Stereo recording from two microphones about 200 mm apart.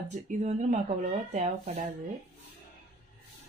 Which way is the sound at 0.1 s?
35° right (ahead or behind).